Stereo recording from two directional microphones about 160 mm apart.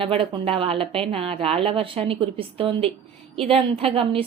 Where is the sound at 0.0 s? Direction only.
35° right (ahead or behind).